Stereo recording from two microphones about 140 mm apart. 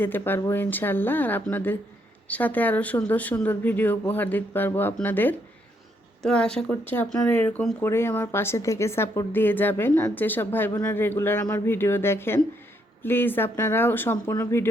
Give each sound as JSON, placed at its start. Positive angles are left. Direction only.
{"t": 0.0, "sound": "a woman's voice", "side_deg": 15}